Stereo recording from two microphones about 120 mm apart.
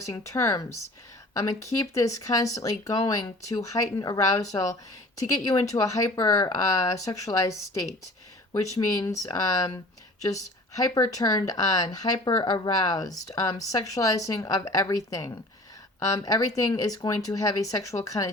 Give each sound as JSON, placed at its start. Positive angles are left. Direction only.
{"t": 0.0, "sound": "speech", "side_deg": 25}
{"t": 8.7, "sound": "speech", "side_deg": 30}
{"t": 10.8, "sound": "speech", "side_deg": 30}